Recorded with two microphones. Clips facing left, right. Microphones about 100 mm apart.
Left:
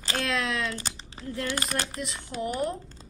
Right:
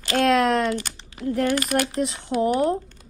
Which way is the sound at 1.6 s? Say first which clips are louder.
Right 8 dB; 35° left (ahead or behind).